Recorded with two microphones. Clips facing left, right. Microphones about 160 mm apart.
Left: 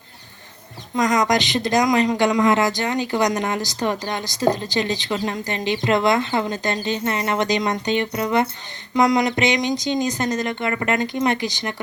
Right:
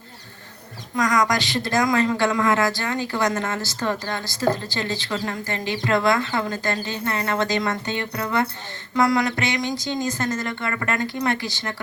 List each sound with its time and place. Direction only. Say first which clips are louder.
0.9 s speech: left 2 dB; 20° left (ahead or behind)